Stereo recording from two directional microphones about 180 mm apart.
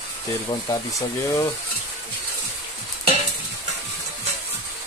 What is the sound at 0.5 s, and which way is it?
Speech, 20° left (ahead or behind).